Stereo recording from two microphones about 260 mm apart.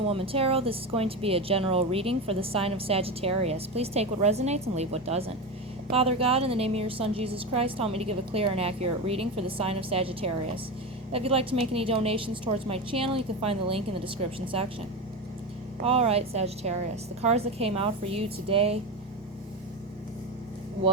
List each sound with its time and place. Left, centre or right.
0.0 s speech: right
15.8 s speech: right